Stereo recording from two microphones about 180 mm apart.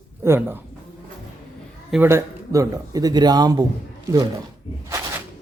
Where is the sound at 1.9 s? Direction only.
10° right (ahead or behind).